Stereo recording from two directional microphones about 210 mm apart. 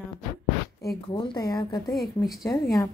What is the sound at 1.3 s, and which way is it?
Speech, 20° left (ahead or behind).